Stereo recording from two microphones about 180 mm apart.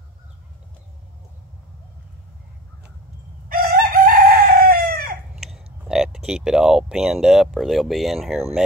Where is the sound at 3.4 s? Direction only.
55° right (ahead or behind).